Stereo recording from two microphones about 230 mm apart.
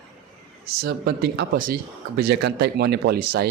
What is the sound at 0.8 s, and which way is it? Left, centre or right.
A man's voice, right.